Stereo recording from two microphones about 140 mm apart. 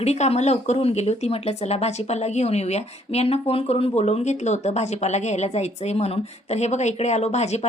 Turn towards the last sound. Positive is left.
turn(degrees=50)  # may be behind; listen again after turning